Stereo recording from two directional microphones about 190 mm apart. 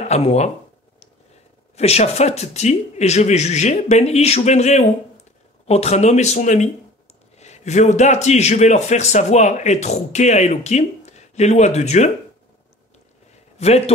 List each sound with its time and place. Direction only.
0.0 s speech: 35° left (ahead or behind)
1.8 s a man's voice: 35° left (ahead or behind)
13.6 s a man's voice: 35° left (ahead or behind)